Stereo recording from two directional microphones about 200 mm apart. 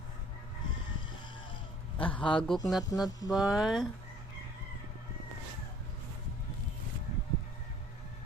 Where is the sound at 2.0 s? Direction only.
25° left (ahead or behind).